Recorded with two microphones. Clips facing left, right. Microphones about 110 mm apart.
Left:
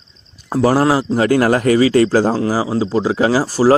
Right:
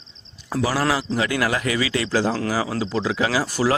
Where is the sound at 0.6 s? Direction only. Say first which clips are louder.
Left 8 dB; 50° left (ahead or behind).